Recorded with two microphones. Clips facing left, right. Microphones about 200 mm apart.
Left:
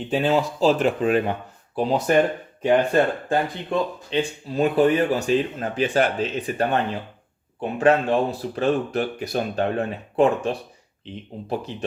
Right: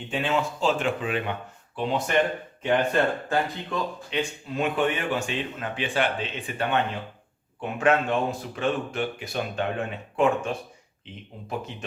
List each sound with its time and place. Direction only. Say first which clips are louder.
0.1 s speech: left 5 dB; 35° left (ahead or behind)
3.2 s speech: left 3 dB; 30° left (ahead or behind)